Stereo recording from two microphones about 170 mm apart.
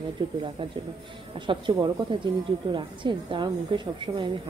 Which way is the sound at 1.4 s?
30° right (ahead or behind).